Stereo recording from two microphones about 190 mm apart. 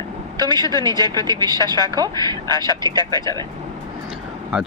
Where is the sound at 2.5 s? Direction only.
20° left (ahead or behind).